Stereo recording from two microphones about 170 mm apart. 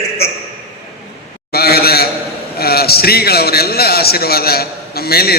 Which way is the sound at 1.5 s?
65° left (ahead or behind).